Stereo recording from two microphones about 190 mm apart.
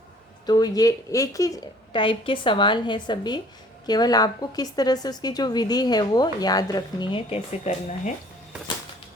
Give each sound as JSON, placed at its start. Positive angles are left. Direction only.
{"t": 0.4, "sound": "a woman's voice", "side_deg": 20}